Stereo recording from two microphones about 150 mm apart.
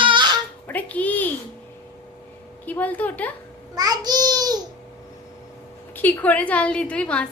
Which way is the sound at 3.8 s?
25° right (ahead or behind).